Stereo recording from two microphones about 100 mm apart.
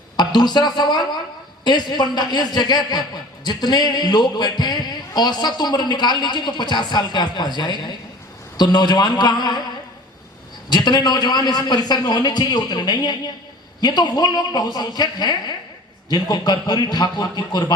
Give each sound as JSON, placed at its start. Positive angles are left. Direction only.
{"t": 0.3, "sound": "speech", "side_deg": 45}
{"t": 10.7, "sound": "speech", "side_deg": 45}